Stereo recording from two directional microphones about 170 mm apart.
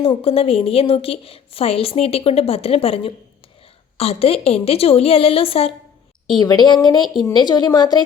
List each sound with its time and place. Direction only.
0.0 s a woman's voice: 35° left (ahead or behind)